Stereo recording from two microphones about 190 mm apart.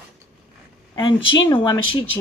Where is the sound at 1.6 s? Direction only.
25° left (ahead or behind).